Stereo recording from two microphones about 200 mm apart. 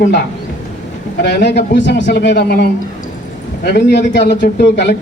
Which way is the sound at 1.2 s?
60° left (ahead or behind).